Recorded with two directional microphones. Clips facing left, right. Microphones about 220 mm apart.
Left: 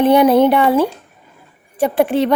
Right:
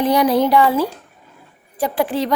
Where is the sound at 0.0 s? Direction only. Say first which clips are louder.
Left 5 dB; 25° left (ahead or behind).